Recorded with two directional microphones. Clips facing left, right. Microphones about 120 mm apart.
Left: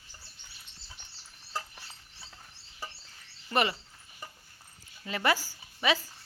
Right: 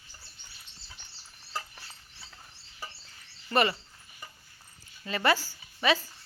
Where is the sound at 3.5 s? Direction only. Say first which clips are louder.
Right 2 dB; 15° left (ahead or behind).